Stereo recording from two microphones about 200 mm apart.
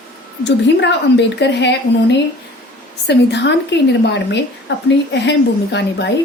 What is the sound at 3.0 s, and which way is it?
Speech, 60° left (ahead or behind).